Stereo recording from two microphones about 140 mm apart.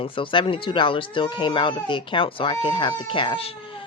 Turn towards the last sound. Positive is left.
turn(degrees=40)  # may be behind; listen again after turning